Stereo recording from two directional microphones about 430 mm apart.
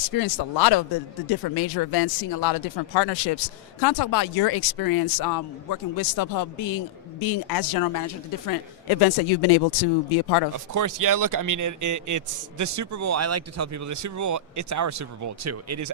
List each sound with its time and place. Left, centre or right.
0.1 s speech: left
10.7 s a man's voice: right